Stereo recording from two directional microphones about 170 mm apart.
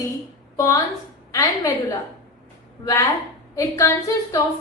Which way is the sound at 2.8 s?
15° left (ahead or behind).